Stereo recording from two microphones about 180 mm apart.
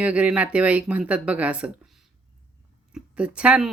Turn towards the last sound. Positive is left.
turn(degrees=-5)  # may be behind; listen again after turning